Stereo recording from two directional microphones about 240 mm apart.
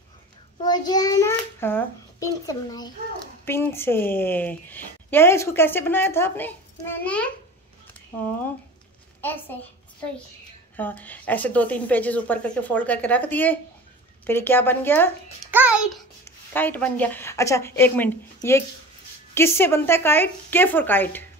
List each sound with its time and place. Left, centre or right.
0.7 s a child's voice: centre
10.8 s a woman's voice: centre
15.5 s a child's voice: centre
16.3 s a woman's voice: centre